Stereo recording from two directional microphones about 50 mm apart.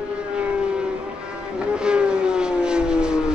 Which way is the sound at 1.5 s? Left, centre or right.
Centre.